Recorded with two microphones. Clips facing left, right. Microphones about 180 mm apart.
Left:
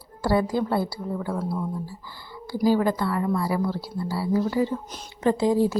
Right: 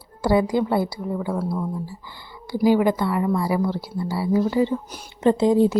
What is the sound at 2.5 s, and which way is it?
A woman's voice, 20° right (ahead or behind).